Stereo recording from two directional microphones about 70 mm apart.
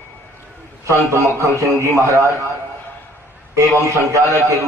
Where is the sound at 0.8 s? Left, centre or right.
Right.